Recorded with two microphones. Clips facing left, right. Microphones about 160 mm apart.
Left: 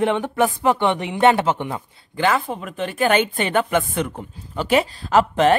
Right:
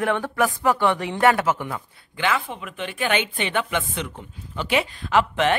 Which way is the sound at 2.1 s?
40° left (ahead or behind).